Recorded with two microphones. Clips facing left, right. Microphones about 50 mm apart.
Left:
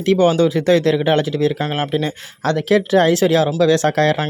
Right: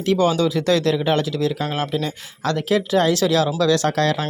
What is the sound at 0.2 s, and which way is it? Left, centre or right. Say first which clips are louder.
Speech: left 4 dB; left.